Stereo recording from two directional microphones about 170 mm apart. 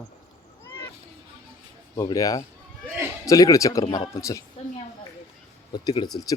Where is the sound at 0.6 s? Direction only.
10° left (ahead or behind).